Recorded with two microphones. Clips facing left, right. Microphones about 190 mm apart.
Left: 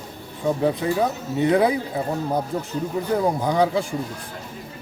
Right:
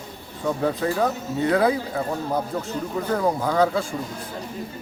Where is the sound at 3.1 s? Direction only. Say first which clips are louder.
Left 1 dB; 15° left (ahead or behind).